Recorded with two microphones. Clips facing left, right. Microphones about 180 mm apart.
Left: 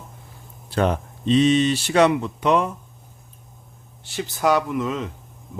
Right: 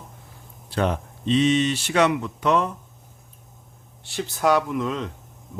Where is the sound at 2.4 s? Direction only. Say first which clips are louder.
Left 1 dB; 15° left (ahead or behind).